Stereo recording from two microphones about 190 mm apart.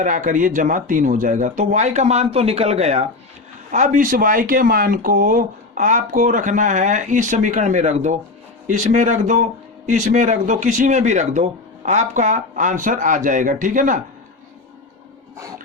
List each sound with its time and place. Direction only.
0.0 s speech: 40° right (ahead or behind)